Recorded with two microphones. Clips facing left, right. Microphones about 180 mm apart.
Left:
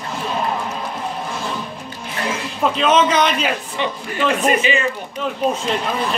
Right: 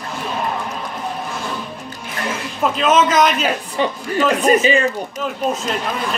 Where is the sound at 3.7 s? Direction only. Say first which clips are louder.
Right 4 dB; 40° right (ahead or behind).